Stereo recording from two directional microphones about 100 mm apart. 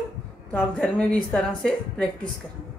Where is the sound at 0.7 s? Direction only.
10° left (ahead or behind).